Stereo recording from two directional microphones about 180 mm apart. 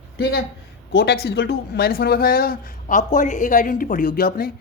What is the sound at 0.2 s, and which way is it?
Speech, 60° left (ahead or behind).